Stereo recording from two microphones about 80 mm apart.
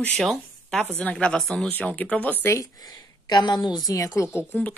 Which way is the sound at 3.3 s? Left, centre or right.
Left.